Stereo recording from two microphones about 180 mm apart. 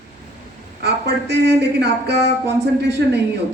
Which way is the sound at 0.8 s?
70° right (ahead or behind).